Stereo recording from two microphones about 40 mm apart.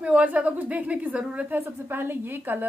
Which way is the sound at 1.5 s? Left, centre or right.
Right.